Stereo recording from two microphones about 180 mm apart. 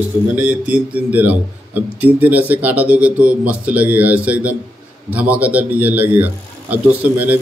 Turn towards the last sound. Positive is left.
turn(degrees=-10)  # may be behind; listen again after turning